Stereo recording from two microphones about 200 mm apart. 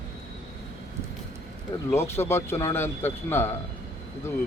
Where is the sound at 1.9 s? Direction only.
10° left (ahead or behind).